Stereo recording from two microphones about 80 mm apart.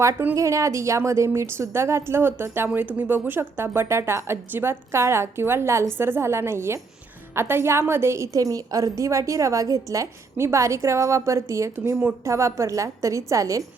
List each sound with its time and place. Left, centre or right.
0.3 s a woman's voice: right